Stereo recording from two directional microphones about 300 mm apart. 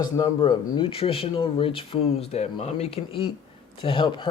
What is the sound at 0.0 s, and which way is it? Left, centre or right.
Speech, centre.